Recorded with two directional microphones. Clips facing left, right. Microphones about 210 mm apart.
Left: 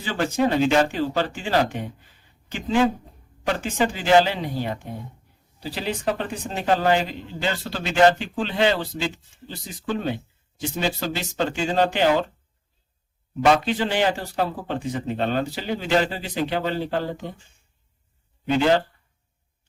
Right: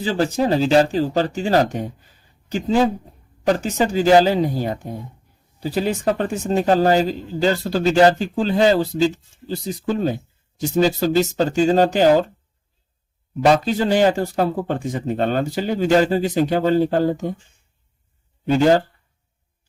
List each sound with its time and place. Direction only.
0.0 s a man's voice: 35° right (ahead or behind)
13.4 s speech: 40° right (ahead or behind)
18.5 s speech: 45° right (ahead or behind)